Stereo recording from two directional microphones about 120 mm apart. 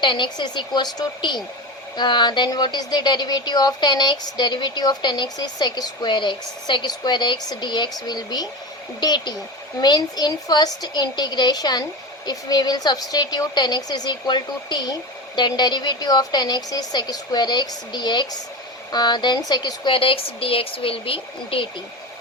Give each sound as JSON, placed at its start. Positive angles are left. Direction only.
{"t": 0.0, "sound": "a woman's voice", "side_deg": 40}
{"t": 19.9, "sound": "speech", "side_deg": 50}